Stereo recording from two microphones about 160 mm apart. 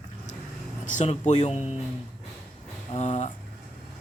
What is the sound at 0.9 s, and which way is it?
Speech, 50° left (ahead or behind).